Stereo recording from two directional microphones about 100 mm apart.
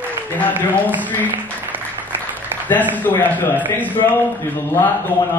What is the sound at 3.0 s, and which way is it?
A man's voice, 20° left (ahead or behind).